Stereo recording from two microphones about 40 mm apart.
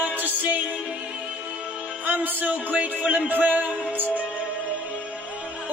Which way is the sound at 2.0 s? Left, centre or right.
Right.